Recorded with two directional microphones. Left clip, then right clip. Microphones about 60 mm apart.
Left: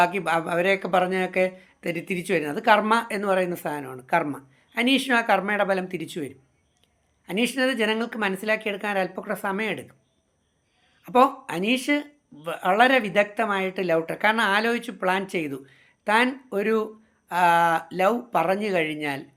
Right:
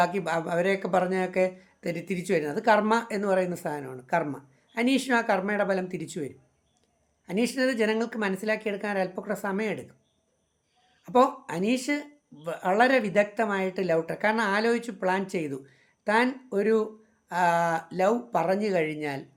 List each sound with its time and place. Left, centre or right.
0.0 s speech: right
11.0 s speech: right